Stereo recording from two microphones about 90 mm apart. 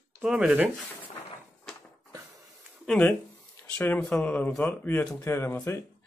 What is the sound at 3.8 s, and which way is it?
Speech, 20° left (ahead or behind).